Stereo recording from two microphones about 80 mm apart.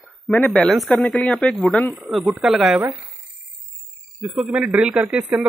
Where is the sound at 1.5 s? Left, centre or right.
Centre.